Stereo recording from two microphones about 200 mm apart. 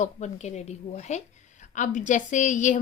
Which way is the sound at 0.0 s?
35° left (ahead or behind).